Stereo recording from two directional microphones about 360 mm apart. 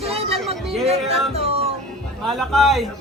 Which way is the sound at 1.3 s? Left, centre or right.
Centre.